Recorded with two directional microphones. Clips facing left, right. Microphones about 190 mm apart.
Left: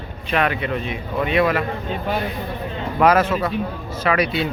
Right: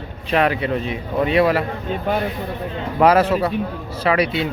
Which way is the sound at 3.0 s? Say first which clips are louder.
Right 2 dB; 30° right (ahead or behind).